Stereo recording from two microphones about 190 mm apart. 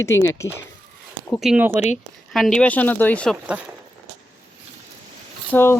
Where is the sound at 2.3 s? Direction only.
Centre (ahead or behind).